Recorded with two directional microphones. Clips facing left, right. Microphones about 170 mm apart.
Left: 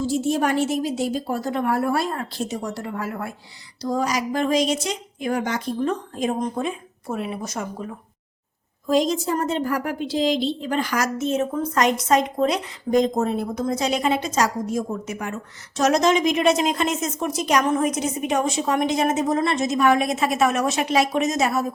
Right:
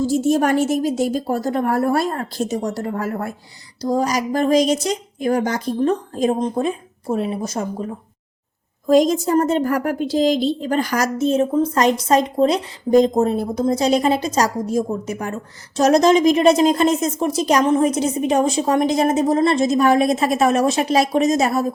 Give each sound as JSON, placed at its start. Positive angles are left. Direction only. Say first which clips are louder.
{"t": 0.0, "sound": "a woman's voice", "louder": "right 5 dB", "side_deg": -45}
{"t": 8.9, "sound": "a woman's voice", "louder": "right 6 dB", "side_deg": -45}